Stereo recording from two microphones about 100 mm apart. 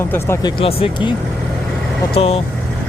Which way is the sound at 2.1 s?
75° left (ahead or behind).